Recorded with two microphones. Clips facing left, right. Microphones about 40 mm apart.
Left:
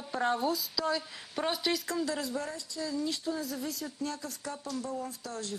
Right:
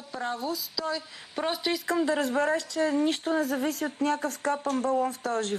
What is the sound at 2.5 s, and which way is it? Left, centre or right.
Speech, right.